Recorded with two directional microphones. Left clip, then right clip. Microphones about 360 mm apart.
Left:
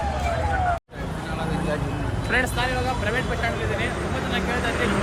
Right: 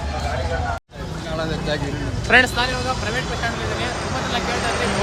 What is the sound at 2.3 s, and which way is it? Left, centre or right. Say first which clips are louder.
Speech: right 9 dB; centre.